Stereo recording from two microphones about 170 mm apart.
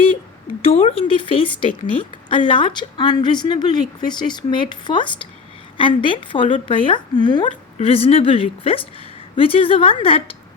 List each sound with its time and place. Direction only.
0.6 s a woman's voice: 35° left (ahead or behind)